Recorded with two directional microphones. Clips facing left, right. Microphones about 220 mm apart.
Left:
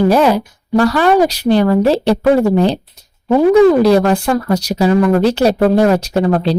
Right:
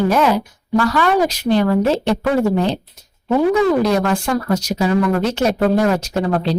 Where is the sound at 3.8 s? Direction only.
35° left (ahead or behind).